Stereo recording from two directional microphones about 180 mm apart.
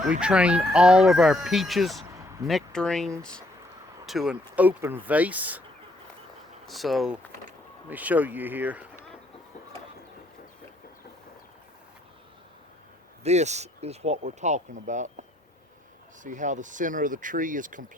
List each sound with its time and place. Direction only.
0.0 s speech: 5° right (ahead or behind)
6.7 s speech: centre (ahead or behind)
13.2 s speech: 40° right (ahead or behind)
16.2 s speech: 45° right (ahead or behind)